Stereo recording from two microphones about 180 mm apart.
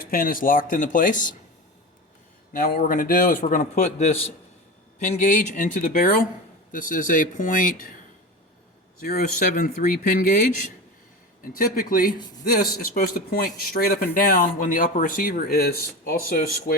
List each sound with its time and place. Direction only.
0.0 s speech: 55° left (ahead or behind)
2.5 s a man's voice: 55° left (ahead or behind)
9.0 s speech: 50° left (ahead or behind)
11.4 s speech: 50° left (ahead or behind)